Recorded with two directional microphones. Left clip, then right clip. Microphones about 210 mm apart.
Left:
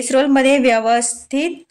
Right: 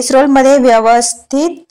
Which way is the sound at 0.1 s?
25° right (ahead or behind).